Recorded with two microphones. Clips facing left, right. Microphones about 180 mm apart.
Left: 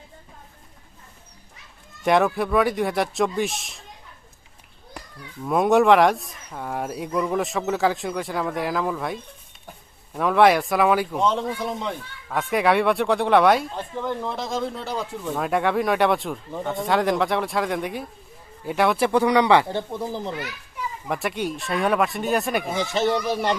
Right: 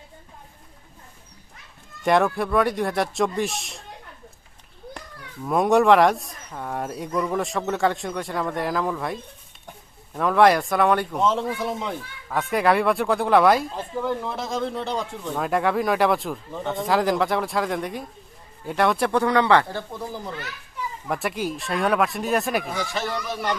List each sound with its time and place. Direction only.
2.0 s speech: centre (ahead or behind)
5.5 s speech: centre (ahead or behind)
19.2 s speech: 15° left (ahead or behind)
21.1 s speech: centre (ahead or behind)
22.7 s speech: 20° left (ahead or behind)